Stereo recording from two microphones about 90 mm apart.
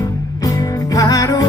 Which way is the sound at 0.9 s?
40° left (ahead or behind).